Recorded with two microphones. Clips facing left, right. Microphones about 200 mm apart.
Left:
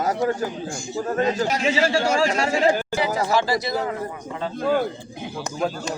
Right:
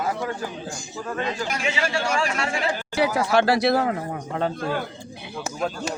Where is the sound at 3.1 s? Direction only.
70° right (ahead or behind).